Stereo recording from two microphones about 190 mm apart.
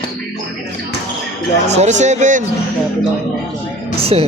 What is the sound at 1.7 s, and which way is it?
Speech, 35° right (ahead or behind).